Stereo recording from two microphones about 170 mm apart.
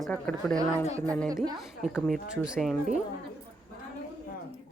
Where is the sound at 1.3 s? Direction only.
25° right (ahead or behind).